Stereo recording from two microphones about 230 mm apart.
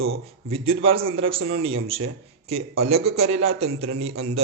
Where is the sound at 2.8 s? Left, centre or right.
Right.